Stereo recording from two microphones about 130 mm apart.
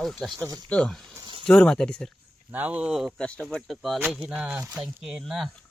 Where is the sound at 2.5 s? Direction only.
10° right (ahead or behind).